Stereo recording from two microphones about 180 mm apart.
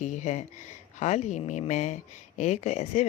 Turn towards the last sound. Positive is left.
turn(degrees=40)  # may be behind; listen again after turning